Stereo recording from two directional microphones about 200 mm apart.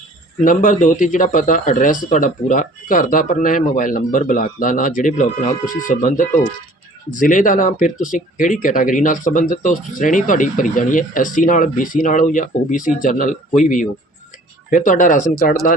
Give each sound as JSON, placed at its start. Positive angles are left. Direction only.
{"t": 0.4, "sound": "speech", "side_deg": 40}